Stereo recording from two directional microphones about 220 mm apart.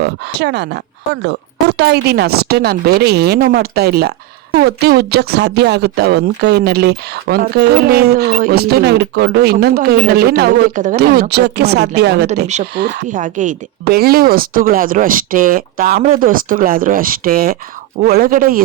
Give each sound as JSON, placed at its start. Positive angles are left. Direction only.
{"t": 0.0, "sound": "speech", "side_deg": -50}
{"t": 13.1, "sound": "speech", "side_deg": -35}